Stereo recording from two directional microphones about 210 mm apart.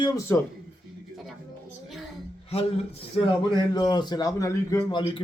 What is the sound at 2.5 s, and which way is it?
A man's voice, 30° left (ahead or behind).